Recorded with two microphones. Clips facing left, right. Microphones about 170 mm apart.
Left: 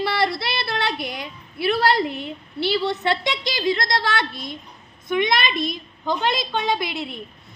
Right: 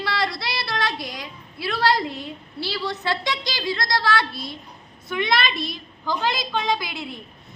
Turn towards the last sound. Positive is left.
turn(degrees=25)  # may be behind; listen again after turning